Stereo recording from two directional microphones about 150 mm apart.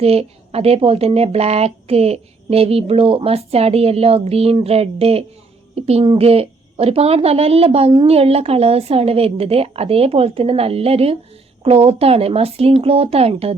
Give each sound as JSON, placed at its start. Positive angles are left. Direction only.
{"t": 0.0, "sound": "a woman's voice", "side_deg": -40}